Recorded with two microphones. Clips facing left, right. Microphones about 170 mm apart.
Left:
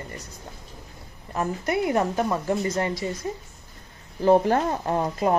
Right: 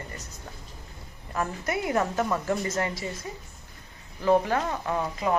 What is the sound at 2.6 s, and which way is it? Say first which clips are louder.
Speech: left 4 dB; 30° left (ahead or behind).